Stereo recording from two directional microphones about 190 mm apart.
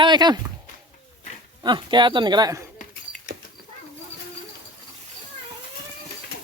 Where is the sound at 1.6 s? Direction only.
25° right (ahead or behind).